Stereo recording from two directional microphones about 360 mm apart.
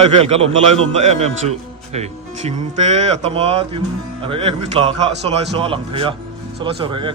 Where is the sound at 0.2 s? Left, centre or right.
Centre.